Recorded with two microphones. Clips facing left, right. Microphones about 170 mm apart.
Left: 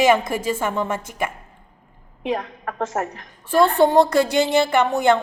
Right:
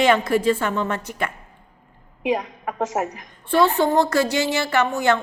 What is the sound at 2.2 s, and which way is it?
A woman's voice, 15° right (ahead or behind).